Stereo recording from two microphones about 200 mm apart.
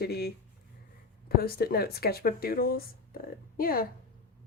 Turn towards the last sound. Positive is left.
turn(degrees=45)  # may be behind; listen again after turning